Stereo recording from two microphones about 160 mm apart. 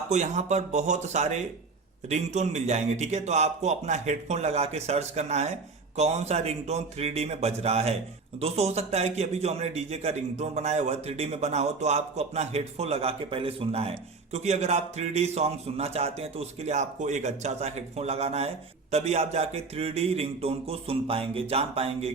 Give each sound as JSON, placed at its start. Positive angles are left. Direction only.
{"t": 0.1, "sound": "a man's voice", "side_deg": -45}